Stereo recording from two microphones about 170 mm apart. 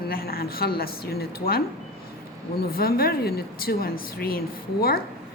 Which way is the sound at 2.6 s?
65° left (ahead or behind).